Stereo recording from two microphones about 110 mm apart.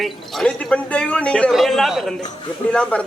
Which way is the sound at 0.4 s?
10° left (ahead or behind).